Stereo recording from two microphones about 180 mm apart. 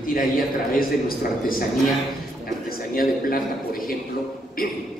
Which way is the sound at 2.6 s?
55° left (ahead or behind).